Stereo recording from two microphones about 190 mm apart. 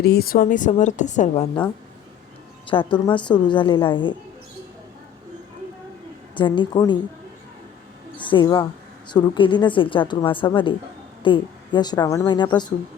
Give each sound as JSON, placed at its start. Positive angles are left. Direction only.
{"t": 0.0, "sound": "a woman's voice", "side_deg": 55}
{"t": 2.6, "sound": "a woman's voice", "side_deg": 25}
{"t": 6.3, "sound": "a woman's voice", "side_deg": 25}
{"t": 8.2, "sound": "a woman's voice", "side_deg": 25}